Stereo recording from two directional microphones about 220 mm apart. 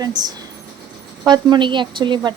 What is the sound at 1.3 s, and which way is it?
A woman's voice, 20° right (ahead or behind).